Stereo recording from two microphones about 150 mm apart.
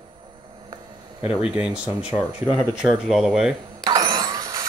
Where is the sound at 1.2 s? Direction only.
5° right (ahead or behind).